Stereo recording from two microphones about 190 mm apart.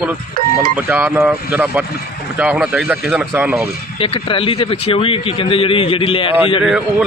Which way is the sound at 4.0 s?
30° left (ahead or behind).